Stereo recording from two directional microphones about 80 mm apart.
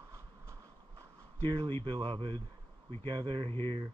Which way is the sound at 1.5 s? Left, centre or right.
Right.